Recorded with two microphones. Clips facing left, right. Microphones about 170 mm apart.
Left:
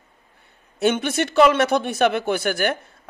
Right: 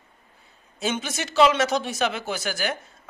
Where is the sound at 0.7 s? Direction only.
60° left (ahead or behind).